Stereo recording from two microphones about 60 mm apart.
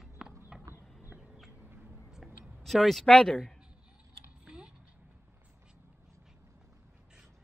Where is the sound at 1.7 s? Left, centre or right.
Right.